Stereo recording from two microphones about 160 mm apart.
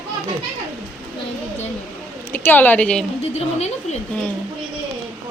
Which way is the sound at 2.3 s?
10° left (ahead or behind).